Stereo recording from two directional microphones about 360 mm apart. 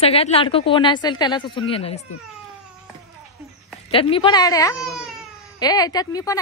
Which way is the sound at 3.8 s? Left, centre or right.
Centre.